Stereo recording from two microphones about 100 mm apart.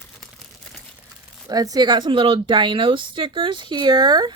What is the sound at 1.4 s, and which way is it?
A woman's voice, 40° right (ahead or behind).